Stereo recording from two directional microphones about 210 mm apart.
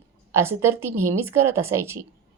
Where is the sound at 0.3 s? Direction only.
10° right (ahead or behind).